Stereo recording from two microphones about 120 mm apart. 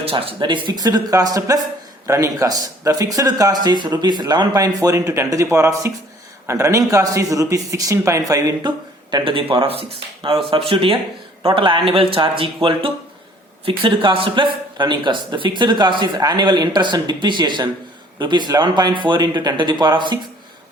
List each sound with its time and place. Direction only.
0.0 s speech: 50° right (ahead or behind)